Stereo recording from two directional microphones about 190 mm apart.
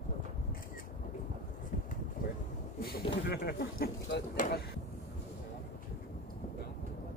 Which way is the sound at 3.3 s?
55° left (ahead or behind).